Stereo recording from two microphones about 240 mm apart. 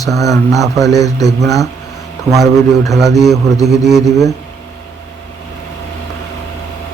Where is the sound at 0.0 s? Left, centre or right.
Centre.